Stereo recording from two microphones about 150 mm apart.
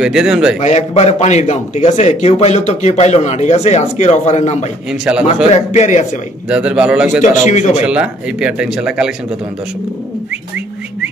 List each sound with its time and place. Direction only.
0.0 s a man's voice: 5° right (ahead or behind)
0.6 s a man's voice: 50° left (ahead or behind)
6.5 s a man's voice: 5° right (ahead or behind)
7.2 s a man's voice: 50° left (ahead or behind)
7.8 s speech: 5° right (ahead or behind)